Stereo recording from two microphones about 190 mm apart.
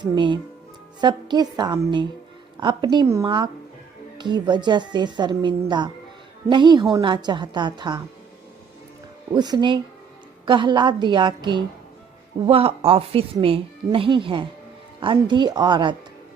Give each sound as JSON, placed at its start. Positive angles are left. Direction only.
{"t": 0.0, "sound": "a woman's voice", "side_deg": -25}
{"t": 9.3, "sound": "a woman's voice", "side_deg": -20}
{"t": 12.5, "sound": "a woman's voice", "side_deg": -30}